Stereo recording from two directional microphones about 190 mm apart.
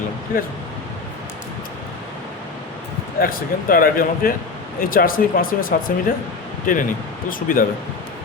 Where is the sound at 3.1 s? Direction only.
50° left (ahead or behind).